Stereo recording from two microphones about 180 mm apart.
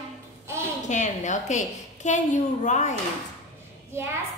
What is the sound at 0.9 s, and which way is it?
A woman's voice, 40° left (ahead or behind).